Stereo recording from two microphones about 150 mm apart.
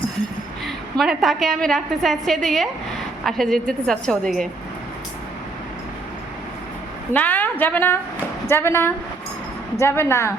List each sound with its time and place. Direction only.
0.6 s a woman's voice: centre (ahead or behind)
7.1 s a woman's voice: 10° left (ahead or behind)